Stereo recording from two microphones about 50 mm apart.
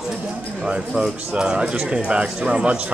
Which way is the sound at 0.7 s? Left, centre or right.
Right.